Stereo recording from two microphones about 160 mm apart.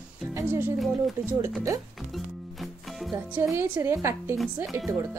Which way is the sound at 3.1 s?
15° right (ahead or behind).